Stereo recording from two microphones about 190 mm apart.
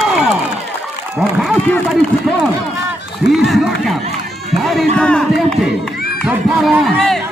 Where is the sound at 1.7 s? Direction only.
5° left (ahead or behind).